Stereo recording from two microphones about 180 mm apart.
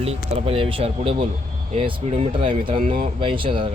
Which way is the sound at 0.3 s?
30° right (ahead or behind).